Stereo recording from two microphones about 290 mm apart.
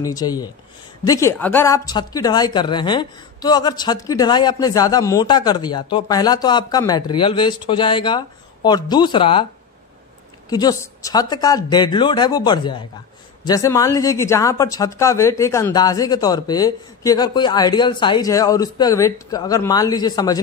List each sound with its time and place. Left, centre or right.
0.0 s speech: centre
10.5 s speech: centre